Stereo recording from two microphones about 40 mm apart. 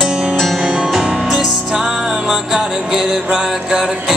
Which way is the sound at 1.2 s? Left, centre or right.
Centre.